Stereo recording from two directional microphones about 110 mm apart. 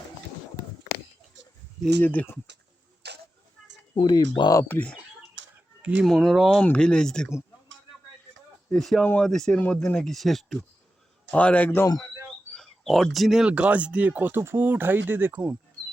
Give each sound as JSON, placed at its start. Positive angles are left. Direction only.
{"t": 2.0, "sound": "speech", "side_deg": 15}
{"t": 4.1, "sound": "speech", "side_deg": 40}
{"t": 4.7, "sound": "speech", "side_deg": 15}
{"t": 6.1, "sound": "speech", "side_deg": 5}
{"t": 8.7, "sound": "speech", "side_deg": 5}
{"t": 11.3, "sound": "speech", "side_deg": 15}
{"t": 12.5, "sound": "speech", "side_deg": 5}